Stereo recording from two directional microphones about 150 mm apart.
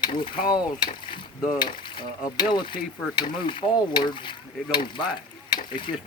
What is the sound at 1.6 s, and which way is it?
Speech, 30° left (ahead or behind).